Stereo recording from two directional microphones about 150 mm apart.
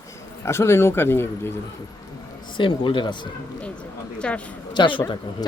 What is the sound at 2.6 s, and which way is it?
Speech, 35° left (ahead or behind).